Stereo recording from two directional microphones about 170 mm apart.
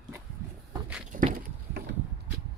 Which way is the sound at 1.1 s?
50° right (ahead or behind).